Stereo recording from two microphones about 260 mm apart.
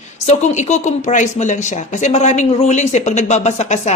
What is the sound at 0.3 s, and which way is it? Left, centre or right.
Speech, left.